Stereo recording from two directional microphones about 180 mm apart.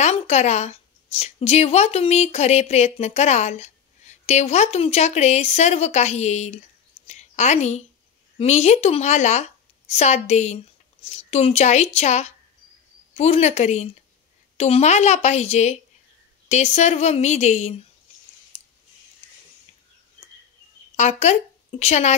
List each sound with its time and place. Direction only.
0.0 s a woman's voice: 40° left (ahead or behind)
18.5 s a sound: 35° left (ahead or behind)
20.9 s a woman's voice: 40° left (ahead or behind)